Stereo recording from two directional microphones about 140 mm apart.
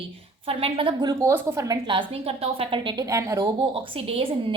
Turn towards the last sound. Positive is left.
turn(degrees=-40)  # may be behind; listen again after turning